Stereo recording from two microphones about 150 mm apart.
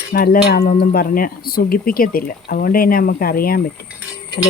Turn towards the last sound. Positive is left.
turn(degrees=70)  # may be behind; listen again after turning